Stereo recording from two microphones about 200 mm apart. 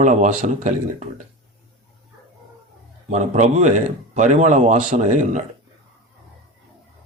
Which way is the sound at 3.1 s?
35° right (ahead or behind).